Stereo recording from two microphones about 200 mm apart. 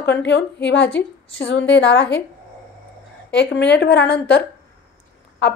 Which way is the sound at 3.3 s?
60° left (ahead or behind).